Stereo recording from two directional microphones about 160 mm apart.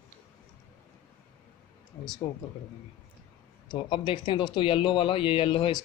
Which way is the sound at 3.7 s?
30° left (ahead or behind).